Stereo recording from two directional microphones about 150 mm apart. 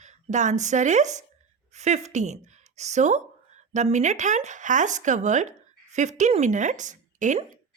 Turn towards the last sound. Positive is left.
turn(degrees=-55)  # may be behind; listen again after turning